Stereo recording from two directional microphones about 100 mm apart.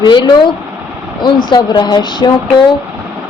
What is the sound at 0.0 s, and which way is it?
A woman's voice, 50° left (ahead or behind).